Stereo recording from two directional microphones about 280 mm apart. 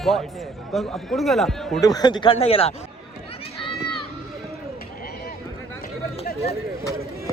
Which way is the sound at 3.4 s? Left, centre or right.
Centre.